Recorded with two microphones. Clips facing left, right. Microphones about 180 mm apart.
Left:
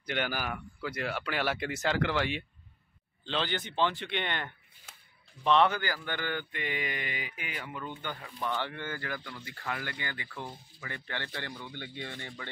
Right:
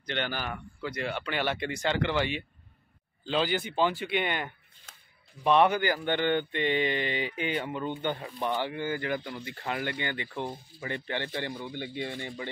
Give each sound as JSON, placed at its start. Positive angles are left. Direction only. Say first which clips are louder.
{"t": 0.0, "sound": "speech", "louder": "even", "side_deg": 10}